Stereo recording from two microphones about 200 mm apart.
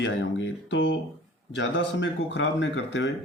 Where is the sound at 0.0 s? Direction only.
65° left (ahead or behind).